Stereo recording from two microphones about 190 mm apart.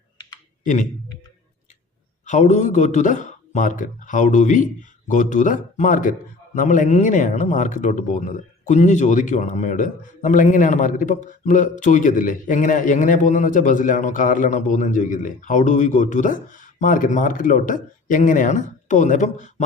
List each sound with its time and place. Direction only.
0.6 s speech: 40° left (ahead or behind)
2.2 s a man's voice: 40° left (ahead or behind)